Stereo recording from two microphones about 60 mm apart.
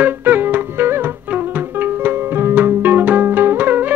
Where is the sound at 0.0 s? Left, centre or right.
Right.